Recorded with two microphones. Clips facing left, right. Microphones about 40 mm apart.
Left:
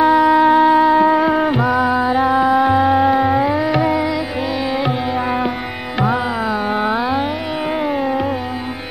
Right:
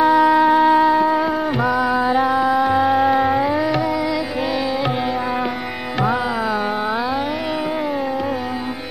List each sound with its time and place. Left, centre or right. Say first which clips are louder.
0.0 s music: left 2 dB; centre
0.9 s music: left 4 dB; centre
1.6 s music: left 2 dB; centre